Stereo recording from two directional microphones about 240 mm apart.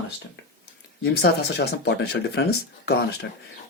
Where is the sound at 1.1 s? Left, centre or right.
Left.